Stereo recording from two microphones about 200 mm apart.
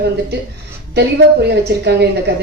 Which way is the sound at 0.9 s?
55° right (ahead or behind).